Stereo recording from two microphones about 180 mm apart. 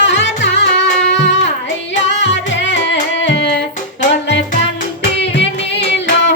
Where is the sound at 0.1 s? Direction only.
90° left.